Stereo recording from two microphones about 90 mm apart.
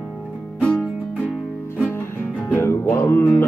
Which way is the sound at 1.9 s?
25° left (ahead or behind).